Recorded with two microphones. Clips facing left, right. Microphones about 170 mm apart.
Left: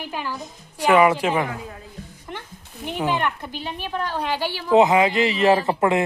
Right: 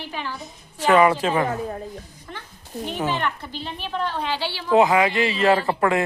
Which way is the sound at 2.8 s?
15° left (ahead or behind).